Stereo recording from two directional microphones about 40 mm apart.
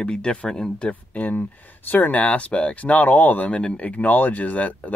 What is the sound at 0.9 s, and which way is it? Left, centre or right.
Speech, left.